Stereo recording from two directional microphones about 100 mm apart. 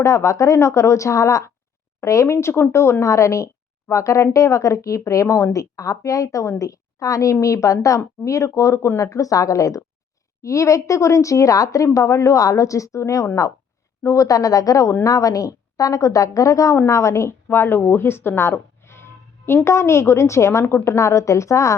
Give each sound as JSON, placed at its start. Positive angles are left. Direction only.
{"t": 0.0, "sound": "a woman's voice", "side_deg": 30}